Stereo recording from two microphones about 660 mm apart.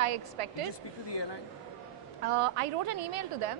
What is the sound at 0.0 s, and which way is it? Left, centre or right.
Speech, right.